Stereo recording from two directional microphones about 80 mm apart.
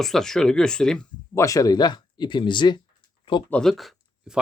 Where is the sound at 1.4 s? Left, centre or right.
Left.